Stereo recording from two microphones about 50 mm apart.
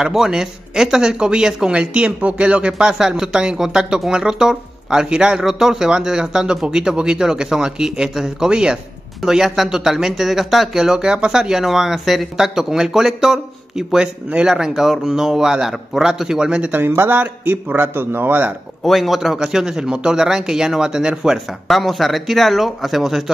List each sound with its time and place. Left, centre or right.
0.0 s speech: centre
16.7 s speech: right
17.1 s a man's voice: right
18.9 s speech: centre
21.6 s speech: centre